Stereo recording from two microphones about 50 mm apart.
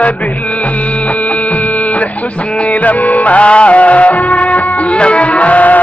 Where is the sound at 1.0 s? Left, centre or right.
Left.